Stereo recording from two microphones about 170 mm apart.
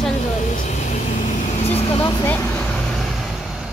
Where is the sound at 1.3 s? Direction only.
40° left (ahead or behind).